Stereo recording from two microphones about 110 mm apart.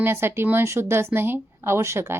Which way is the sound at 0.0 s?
20° right (ahead or behind).